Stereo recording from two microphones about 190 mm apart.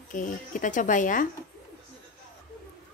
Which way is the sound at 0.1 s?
45° left (ahead or behind).